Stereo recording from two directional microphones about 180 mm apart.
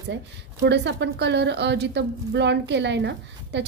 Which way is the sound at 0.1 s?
70° right (ahead or behind).